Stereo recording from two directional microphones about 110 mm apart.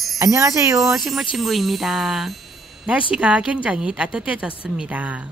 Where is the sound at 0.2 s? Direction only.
30° right (ahead or behind).